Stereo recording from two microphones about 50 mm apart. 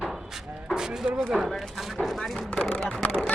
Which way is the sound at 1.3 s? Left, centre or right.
Centre.